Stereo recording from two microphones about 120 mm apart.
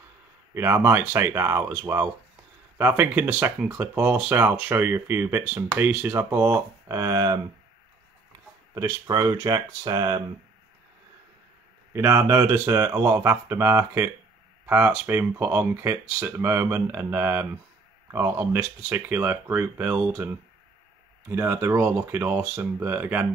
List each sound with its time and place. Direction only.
0.6 s speech: 20° right (ahead or behind)
8.7 s speech: 25° right (ahead or behind)
11.9 s speech: 20° right (ahead or behind)
21.3 s speech: 20° right (ahead or behind)